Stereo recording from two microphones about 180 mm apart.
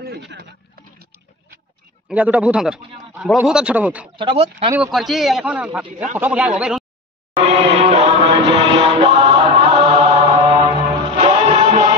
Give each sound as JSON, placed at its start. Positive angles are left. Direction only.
{"t": 0.0, "sound": "a sound", "side_deg": -65}
{"t": 2.0, "sound": "a man's voice", "side_deg": -10}
{"t": 4.2, "sound": "speech", "side_deg": -30}
{"t": 4.7, "sound": "a man's voice", "side_deg": -5}
{"t": 7.3, "sound": "music", "side_deg": -30}